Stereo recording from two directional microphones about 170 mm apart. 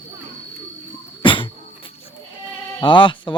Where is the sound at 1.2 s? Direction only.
30° left (ahead or behind).